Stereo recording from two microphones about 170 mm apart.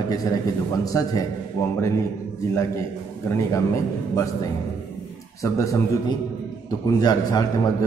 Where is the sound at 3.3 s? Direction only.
20° left (ahead or behind).